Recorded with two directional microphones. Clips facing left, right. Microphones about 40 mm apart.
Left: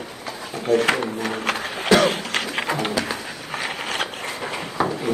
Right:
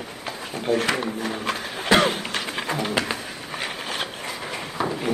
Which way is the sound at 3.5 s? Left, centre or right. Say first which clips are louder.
Left 3 dB; left.